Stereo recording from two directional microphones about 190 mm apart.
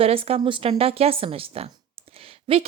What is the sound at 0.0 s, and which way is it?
A woman's voice, 30° right (ahead or behind).